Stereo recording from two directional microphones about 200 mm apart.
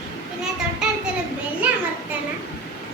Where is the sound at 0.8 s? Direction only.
5° right (ahead or behind).